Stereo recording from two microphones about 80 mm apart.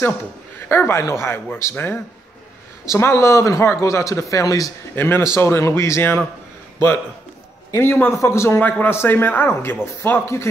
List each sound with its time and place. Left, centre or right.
0.6 s speech: left
4.9 s speech: left
7.7 s speech: left
8.5 s speech: left